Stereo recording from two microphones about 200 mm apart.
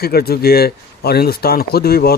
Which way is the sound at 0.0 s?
50° left (ahead or behind).